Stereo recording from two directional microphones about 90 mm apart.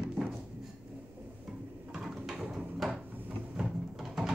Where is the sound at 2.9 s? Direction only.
20° right (ahead or behind).